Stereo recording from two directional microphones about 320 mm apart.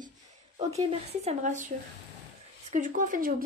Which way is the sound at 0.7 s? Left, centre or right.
Right.